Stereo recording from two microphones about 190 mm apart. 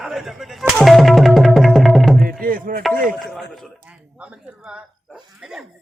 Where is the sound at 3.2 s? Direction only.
Centre (ahead or behind).